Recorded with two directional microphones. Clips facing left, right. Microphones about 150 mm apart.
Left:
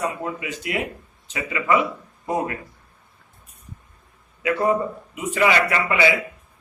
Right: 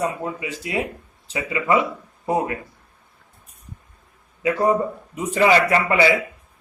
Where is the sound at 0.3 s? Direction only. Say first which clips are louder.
Right 1 dB; 30° right (ahead or behind).